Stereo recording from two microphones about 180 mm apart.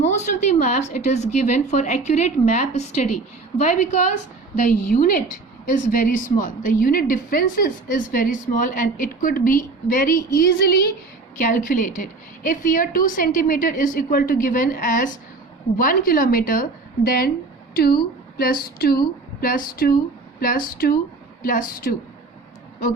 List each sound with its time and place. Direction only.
0.0 s a woman's voice: 40° left (ahead or behind)